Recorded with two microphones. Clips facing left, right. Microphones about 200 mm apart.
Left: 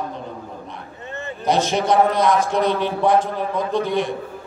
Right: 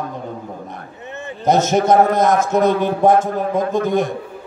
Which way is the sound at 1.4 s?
45° right (ahead or behind).